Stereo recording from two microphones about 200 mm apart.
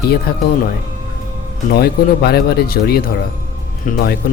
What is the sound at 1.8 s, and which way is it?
Speech, 50° left (ahead or behind).